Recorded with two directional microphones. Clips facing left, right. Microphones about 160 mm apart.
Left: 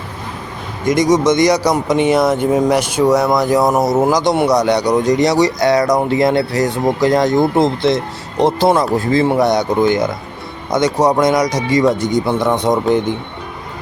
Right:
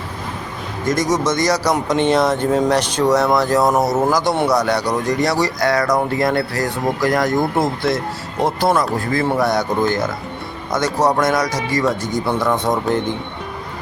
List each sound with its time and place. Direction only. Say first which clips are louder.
0.9 s speech: left 6 dB; 15° left (ahead or behind)